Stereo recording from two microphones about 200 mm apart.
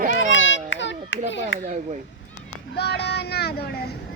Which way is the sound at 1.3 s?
65° left (ahead or behind).